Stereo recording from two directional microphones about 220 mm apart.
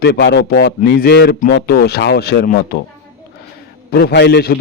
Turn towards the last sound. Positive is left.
turn(degrees=45)  # may be behind; listen again after turning